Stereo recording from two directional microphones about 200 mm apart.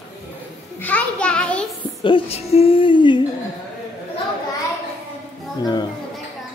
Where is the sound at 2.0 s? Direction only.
25° left (ahead or behind).